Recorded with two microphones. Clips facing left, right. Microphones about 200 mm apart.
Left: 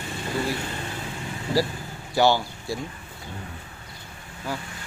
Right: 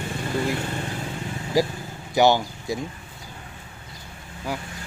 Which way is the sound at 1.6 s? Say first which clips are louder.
Right 3 dB; 15° right (ahead or behind).